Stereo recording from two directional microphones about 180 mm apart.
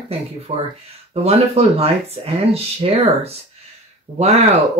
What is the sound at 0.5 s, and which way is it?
Speech, 35° right (ahead or behind).